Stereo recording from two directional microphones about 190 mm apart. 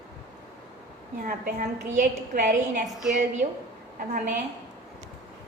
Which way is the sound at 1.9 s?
40° right (ahead or behind).